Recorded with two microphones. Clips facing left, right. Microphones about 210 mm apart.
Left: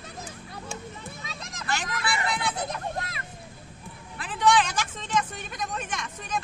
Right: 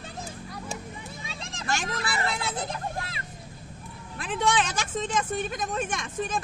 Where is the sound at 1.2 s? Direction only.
30° right (ahead or behind).